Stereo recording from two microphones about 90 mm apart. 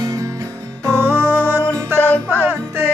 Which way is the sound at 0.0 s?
40° right (ahead or behind).